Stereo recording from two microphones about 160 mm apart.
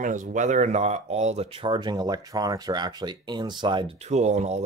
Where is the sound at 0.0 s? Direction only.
55° right (ahead or behind); by 3.8 s 30° right (ahead or behind).